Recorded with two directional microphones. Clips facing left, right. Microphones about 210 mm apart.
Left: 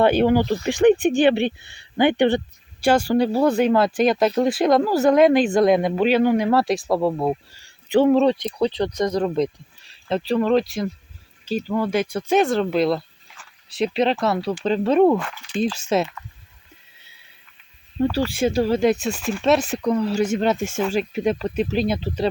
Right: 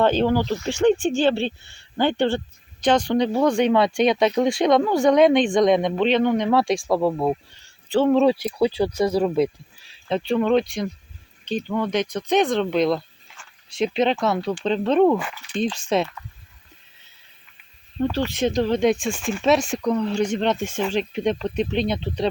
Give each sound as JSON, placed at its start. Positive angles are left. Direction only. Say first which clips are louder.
{"t": 0.0, "sound": "speech", "louder": "left 2 dB", "side_deg": 15}
{"t": 7.9, "sound": "speech", "louder": "left 3 dB", "side_deg": 15}
{"t": 8.1, "sound": "speech", "louder": "even", "side_deg": -5}
{"t": 15.2, "sound": "speech", "louder": "left 1 dB", "side_deg": -5}
{"t": 18.0, "sound": "speech", "louder": "left 2 dB", "side_deg": 10}